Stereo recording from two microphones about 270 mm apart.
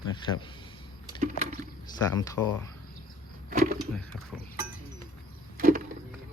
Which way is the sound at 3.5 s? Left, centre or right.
Right.